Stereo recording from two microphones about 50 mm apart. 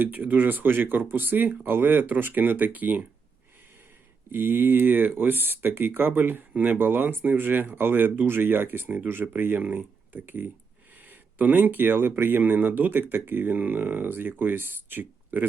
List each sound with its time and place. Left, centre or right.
0.0 s speech: right
4.3 s speech: right